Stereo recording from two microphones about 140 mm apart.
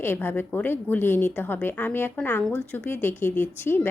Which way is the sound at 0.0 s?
15° left (ahead or behind).